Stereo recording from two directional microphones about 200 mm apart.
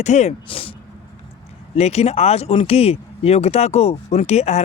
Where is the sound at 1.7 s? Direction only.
30° left (ahead or behind).